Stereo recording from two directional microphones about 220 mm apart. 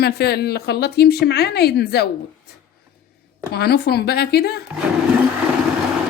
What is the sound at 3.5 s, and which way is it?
Speech, 45° left (ahead or behind).